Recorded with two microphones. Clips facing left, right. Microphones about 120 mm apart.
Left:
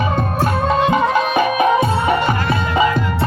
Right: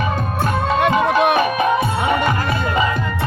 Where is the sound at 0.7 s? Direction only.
65° right (ahead or behind).